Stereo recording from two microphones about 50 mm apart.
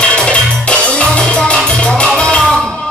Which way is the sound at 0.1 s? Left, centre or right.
Left.